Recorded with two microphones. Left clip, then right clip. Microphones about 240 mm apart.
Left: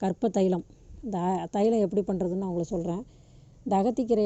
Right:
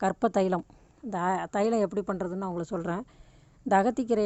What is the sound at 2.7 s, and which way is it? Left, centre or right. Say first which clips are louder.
Speech: left 1 dB; right.